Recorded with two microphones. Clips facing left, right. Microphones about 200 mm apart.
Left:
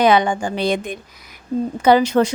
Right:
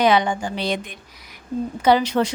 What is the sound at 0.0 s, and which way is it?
A woman's voice, 50° left (ahead or behind).